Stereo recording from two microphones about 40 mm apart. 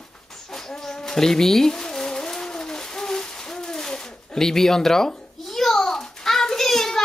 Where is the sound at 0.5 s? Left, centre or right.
Centre.